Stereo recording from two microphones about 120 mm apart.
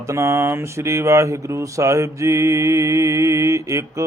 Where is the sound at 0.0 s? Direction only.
25° right (ahead or behind).